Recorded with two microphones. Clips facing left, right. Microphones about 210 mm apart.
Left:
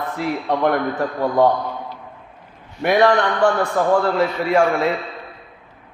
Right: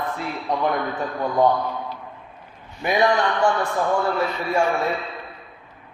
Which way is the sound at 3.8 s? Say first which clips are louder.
Left 7 dB; 80° left.